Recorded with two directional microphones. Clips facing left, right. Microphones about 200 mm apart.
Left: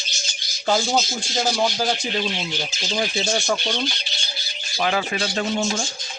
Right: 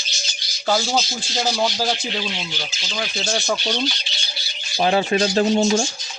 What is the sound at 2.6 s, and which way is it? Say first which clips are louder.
Speech: left 4 dB; 50° left (ahead or behind).